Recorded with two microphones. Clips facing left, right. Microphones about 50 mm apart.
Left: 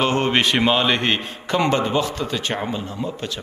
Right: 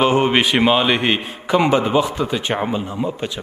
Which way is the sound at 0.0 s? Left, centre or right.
Centre.